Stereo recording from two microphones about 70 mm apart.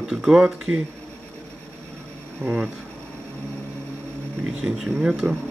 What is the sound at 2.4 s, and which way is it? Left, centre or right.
Speech, centre.